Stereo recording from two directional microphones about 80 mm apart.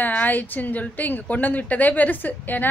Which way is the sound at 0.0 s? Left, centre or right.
Left.